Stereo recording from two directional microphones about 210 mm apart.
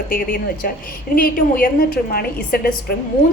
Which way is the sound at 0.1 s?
45° left (ahead or behind).